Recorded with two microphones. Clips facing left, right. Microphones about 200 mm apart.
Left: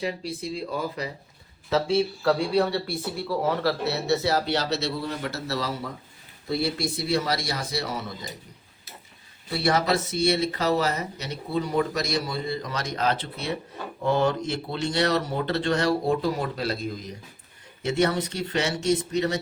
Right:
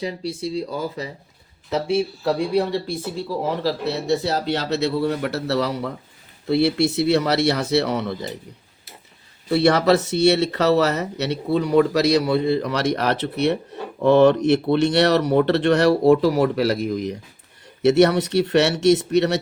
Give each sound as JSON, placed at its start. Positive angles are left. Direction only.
{"t": 0.0, "sound": "speech", "side_deg": -35}
{"t": 2.2, "sound": "a man's voice", "side_deg": -15}
{"t": 4.7, "sound": "speech", "side_deg": -60}
{"t": 9.5, "sound": "speech", "side_deg": -65}